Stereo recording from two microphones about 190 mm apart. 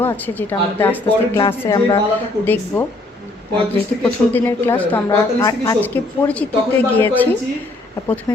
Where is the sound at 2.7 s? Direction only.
10° left (ahead or behind).